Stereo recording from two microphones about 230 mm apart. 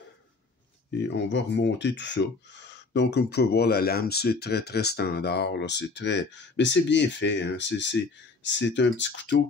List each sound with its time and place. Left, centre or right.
1.0 s speech: left